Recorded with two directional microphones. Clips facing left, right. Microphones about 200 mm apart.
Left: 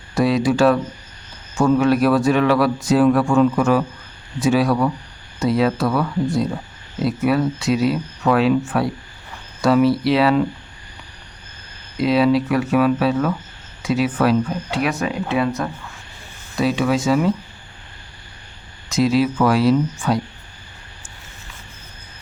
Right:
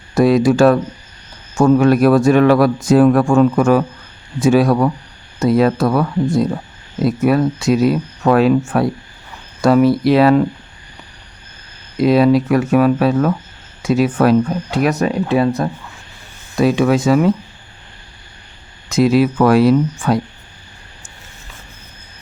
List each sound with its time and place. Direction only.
0.1 s speech: 50° right (ahead or behind)
12.0 s speech: 45° right (ahead or behind)
16.6 s speech: 50° right (ahead or behind)
18.9 s speech: 55° right (ahead or behind)